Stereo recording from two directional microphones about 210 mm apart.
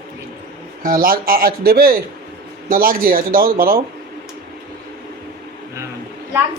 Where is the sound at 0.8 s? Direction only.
40° right (ahead or behind).